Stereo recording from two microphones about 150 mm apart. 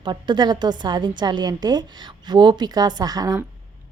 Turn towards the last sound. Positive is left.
turn(degrees=-25)  # may be behind; listen again after turning